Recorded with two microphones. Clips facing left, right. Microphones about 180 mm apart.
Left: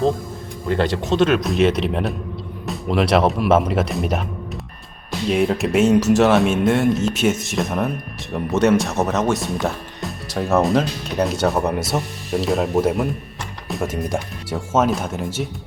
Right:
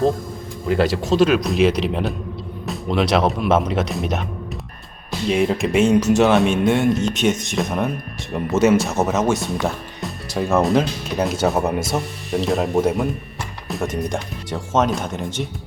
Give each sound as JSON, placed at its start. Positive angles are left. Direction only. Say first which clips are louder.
{"t": 0.7, "sound": "speech", "louder": "right 1 dB", "side_deg": -5}
{"t": 5.3, "sound": "speech", "louder": "even", "side_deg": 0}